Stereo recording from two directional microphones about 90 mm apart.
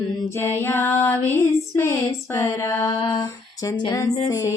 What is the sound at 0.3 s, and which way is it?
Female singing, 25° left (ahead or behind).